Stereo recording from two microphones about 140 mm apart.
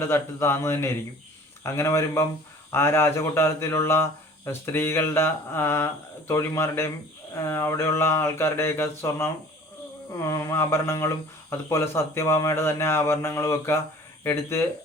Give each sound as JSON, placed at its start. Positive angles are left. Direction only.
{"t": 0.1, "sound": "speech", "side_deg": 20}
{"t": 7.3, "sound": "a sound", "side_deg": 20}
{"t": 10.1, "sound": "speech", "side_deg": 20}